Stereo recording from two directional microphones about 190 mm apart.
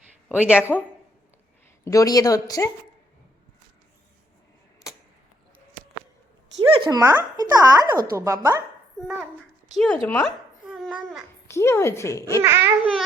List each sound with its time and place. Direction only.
0.3 s speech: 5° right (ahead or behind)
1.8 s speech: 15° left (ahead or behind)
6.6 s speech: 20° right (ahead or behind)
9.7 s speech: 5° left (ahead or behind)
10.7 s babbling: 5° right (ahead or behind)
11.4 s speech: 15° left (ahead or behind)
12.4 s speech: 15° right (ahead or behind)